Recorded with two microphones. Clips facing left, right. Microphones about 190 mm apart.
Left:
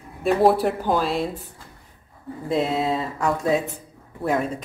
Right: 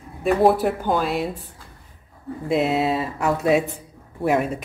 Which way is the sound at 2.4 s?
10° right (ahead or behind).